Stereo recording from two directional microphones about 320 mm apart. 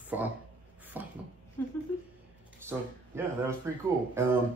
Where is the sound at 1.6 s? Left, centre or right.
Centre.